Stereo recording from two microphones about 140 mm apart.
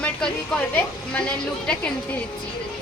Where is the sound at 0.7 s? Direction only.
10° left (ahead or behind).